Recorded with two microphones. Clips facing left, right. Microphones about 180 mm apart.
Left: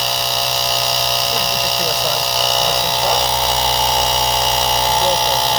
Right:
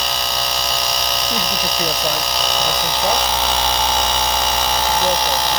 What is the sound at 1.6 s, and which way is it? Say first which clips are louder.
Speech: left 1 dB; 10° left (ahead or behind).